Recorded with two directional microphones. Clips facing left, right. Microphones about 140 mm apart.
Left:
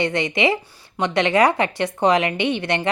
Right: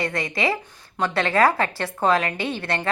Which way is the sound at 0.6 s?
10° left (ahead or behind).